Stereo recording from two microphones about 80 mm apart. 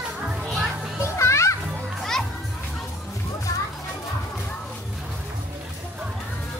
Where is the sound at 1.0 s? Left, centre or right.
Left.